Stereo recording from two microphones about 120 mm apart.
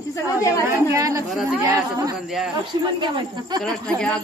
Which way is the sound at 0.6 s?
25° right (ahead or behind).